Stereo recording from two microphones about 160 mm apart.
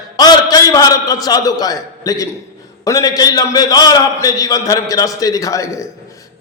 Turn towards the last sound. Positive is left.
turn(degrees=20)  # may be behind; listen again after turning